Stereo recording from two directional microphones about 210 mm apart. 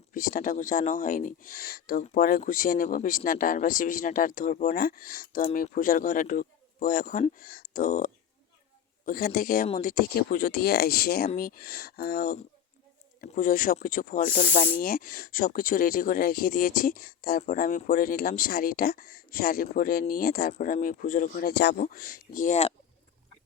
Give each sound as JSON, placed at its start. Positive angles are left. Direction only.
{"t": 0.1, "sound": "speech", "side_deg": 40}